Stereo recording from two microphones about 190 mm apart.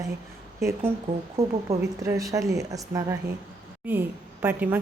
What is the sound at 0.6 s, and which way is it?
A woman's voice, 10° right (ahead or behind).